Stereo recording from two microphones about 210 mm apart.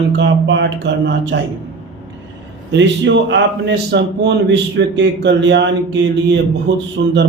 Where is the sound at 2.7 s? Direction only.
60° right (ahead or behind).